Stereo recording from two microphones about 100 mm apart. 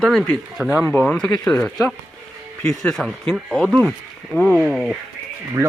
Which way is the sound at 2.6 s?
5° left (ahead or behind).